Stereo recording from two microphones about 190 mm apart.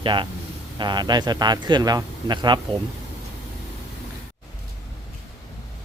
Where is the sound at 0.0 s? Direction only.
25° right (ahead or behind).